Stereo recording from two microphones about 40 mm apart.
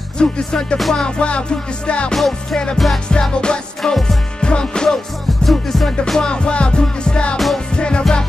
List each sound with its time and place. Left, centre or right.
0.2 s music: left
0.7 s music: centre
1.0 s music: left
5.4 s music: centre
6.0 s music: centre